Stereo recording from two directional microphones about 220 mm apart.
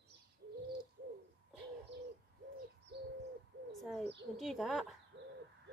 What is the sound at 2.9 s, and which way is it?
Bird, 50° right (ahead or behind).